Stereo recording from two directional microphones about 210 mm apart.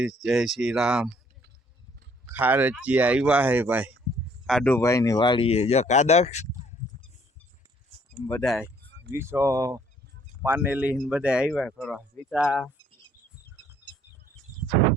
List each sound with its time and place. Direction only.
0.0 s speech: centre (ahead or behind)
2.3 s speech: 10° right (ahead or behind)
4.4 s speech: 5° left (ahead or behind); by 6.5 s 30° left (ahead or behind)
7.9 s a sound: 25° right (ahead or behind)
8.3 s speech: 5° left (ahead or behind)
9.1 s speech: 15° right (ahead or behind)